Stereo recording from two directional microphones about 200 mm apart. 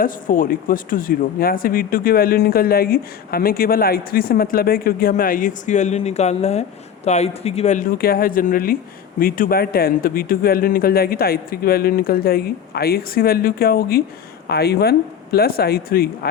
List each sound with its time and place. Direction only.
0.0 s speech: 45° left (ahead or behind)